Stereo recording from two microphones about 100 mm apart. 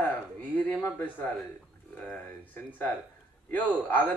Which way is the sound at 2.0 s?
15° left (ahead or behind).